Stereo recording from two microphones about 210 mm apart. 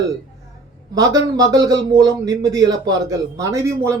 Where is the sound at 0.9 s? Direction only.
15° right (ahead or behind).